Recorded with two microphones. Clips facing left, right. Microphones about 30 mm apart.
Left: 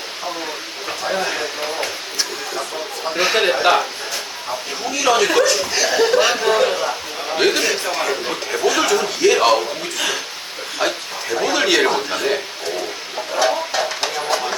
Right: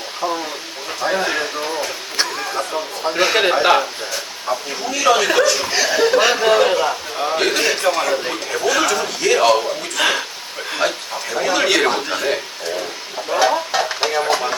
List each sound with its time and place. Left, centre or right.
1.1 s speech: centre
3.1 s speech: centre
4.9 s speech: centre
7.3 s speech: centre
10.0 s speech: right
10.8 s a man's voice: centre
13.3 s bird: centre
14.3 s a sound: centre